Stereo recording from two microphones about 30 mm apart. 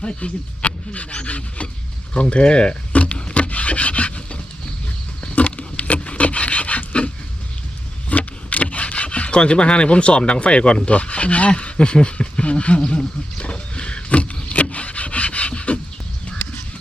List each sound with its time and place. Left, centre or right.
0.0 s speech: left
2.9 s a sound: left
3.3 s rub: left
5.4 s rub: left
8.1 s a sound: left
10.8 s speech: left
11.5 s speech: left
12.9 s wild animals: left
14.5 s wood: left